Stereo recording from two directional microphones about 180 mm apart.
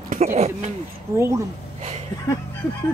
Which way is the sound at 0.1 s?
40° right (ahead or behind).